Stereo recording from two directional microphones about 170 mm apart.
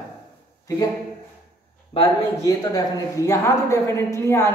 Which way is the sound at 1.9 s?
35° left (ahead or behind).